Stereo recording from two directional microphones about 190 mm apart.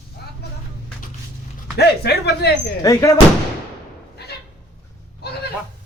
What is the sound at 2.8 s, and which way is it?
Speech, 15° left (ahead or behind).